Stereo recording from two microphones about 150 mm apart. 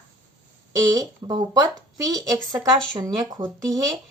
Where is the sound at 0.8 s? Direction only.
25° right (ahead or behind).